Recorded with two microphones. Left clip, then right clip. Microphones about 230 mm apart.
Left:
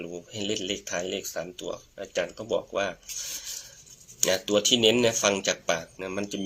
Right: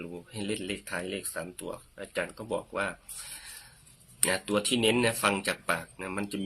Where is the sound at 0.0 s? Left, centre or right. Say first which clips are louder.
Left 5 dB; centre.